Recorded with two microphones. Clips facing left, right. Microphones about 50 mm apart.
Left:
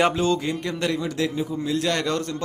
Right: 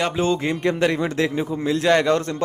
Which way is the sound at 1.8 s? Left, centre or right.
Right.